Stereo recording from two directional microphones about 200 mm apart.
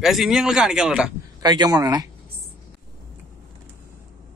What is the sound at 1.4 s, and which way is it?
Speech, 20° right (ahead or behind).